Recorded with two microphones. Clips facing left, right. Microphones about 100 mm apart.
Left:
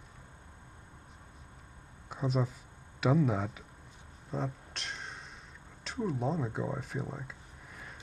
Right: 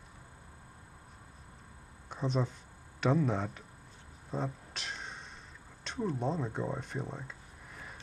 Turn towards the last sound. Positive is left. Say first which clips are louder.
# even
turn(degrees=0)  # may be behind; listen again after turning